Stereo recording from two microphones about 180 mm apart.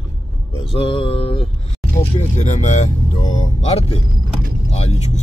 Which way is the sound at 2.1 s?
40° left (ahead or behind).